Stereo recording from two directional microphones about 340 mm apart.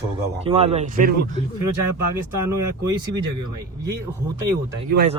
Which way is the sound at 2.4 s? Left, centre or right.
Centre.